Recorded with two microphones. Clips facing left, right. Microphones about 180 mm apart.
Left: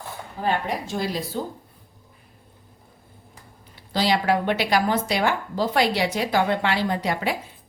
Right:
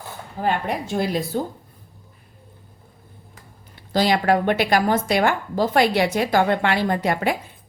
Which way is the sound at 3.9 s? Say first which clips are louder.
Right 3 dB; 50° right (ahead or behind).